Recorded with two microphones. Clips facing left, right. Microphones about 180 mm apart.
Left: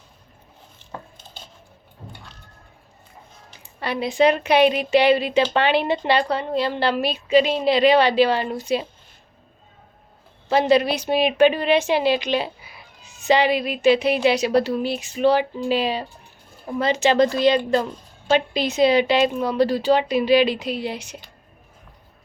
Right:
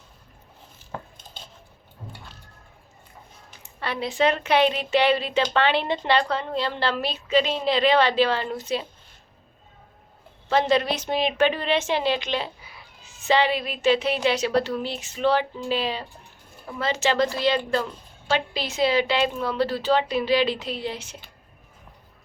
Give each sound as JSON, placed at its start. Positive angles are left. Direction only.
{"t": 3.8, "sound": "a woman's voice", "side_deg": 15}
{"t": 10.5, "sound": "a woman's voice", "side_deg": 10}